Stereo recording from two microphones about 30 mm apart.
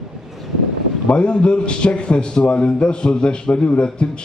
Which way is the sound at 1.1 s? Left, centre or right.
Left.